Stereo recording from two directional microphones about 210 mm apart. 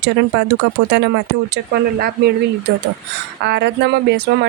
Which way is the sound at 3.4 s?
55° right (ahead or behind).